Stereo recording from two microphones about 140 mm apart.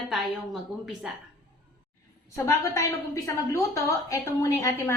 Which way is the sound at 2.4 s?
20° left (ahead or behind).